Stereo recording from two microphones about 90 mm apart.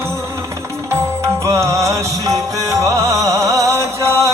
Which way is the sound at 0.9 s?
35° right (ahead or behind).